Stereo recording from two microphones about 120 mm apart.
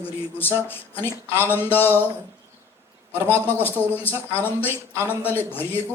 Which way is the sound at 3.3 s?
15° left (ahead or behind).